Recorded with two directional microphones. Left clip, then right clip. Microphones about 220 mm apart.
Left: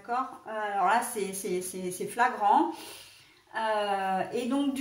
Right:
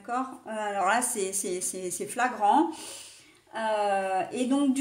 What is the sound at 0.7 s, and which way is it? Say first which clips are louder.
Speech: even; 40° right (ahead or behind).